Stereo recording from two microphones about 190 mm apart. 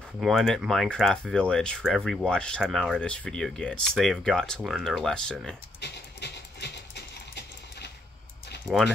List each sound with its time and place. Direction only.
0.2 s speech: centre (ahead or behind)
5.8 s music: 65° left (ahead or behind)
8.7 s speech: centre (ahead or behind)